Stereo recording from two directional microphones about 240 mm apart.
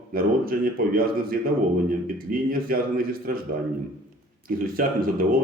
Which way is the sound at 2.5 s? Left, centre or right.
Right.